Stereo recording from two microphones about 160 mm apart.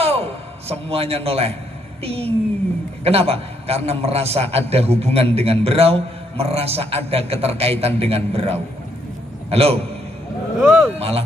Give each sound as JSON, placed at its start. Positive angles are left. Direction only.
{"t": 0.0, "sound": "a sound", "side_deg": -40}
{"t": 0.7, "sound": "a man's voice", "side_deg": -40}
{"t": 10.6, "sound": "speech", "side_deg": -5}
{"t": 11.0, "sound": "a man's voice", "side_deg": -40}